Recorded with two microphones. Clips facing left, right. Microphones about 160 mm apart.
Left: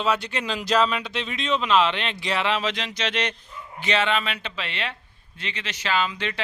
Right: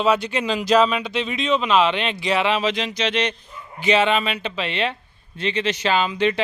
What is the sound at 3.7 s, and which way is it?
Speech, 10° right (ahead or behind).